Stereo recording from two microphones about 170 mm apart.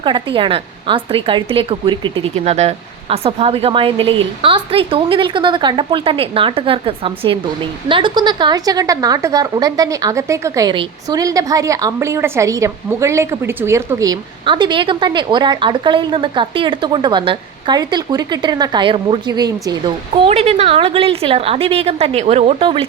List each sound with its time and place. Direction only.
0.0 s a woman's voice: 30° right (ahead or behind)